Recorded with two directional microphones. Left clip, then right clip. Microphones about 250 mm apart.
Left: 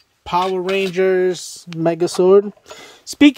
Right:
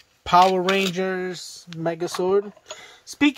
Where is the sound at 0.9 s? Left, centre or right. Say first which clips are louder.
Left 10 dB; centre.